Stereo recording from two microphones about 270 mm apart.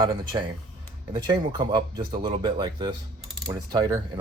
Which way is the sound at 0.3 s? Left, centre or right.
Centre.